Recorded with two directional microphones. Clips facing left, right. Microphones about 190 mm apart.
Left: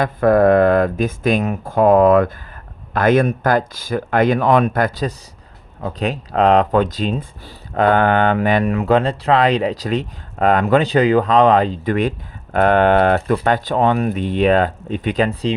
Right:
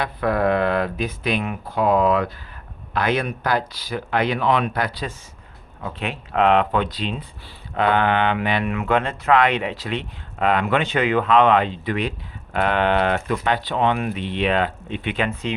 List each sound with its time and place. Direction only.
0.0 s speech: 45° left (ahead or behind)